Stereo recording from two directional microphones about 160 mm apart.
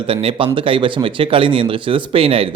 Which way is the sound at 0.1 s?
35° right (ahead or behind).